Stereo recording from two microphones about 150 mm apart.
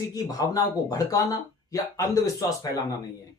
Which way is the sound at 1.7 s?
25° left (ahead or behind).